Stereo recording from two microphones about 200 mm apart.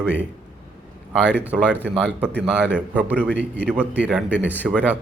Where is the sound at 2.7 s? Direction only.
5° right (ahead or behind).